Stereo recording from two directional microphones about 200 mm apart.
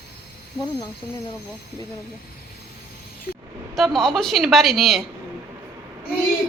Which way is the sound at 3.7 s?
Centre (ahead or behind).